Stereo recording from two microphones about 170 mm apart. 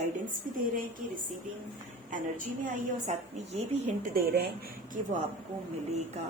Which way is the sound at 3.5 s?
40° right (ahead or behind).